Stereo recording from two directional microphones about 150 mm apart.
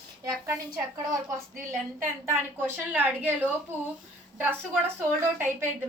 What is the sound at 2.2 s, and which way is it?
A woman's voice, 15° right (ahead or behind).